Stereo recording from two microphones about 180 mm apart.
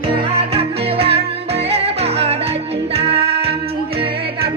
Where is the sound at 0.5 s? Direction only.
30° right (ahead or behind).